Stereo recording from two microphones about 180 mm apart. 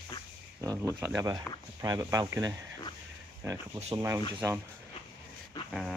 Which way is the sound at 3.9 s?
15° right (ahead or behind).